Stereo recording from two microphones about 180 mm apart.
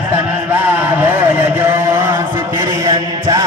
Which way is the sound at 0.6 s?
10° right (ahead or behind).